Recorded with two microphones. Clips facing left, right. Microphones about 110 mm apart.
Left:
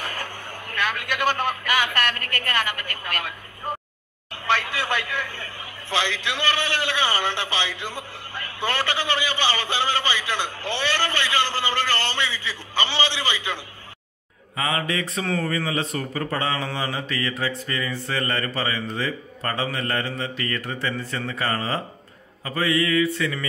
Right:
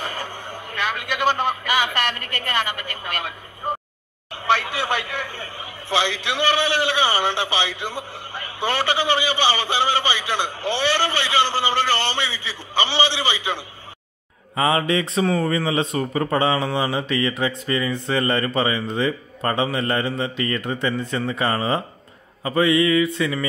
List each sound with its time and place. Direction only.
0.0 s a sound: 15° right (ahead or behind)
1.7 s a man's voice: 15° right (ahead or behind)
4.3 s a man's voice: 15° right (ahead or behind)
12.9 s speech: 15° right (ahead or behind)
14.5 s speech: 30° right (ahead or behind)